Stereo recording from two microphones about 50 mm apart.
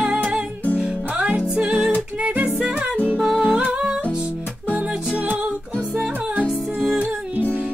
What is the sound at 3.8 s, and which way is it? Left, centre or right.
Music, centre.